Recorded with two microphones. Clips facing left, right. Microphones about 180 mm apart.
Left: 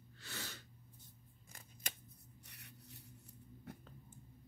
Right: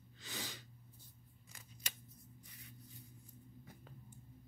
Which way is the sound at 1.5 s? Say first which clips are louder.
Left 3 dB; 45° left (ahead or behind).